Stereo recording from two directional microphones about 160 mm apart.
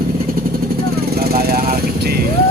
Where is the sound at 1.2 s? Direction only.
70° right (ahead or behind).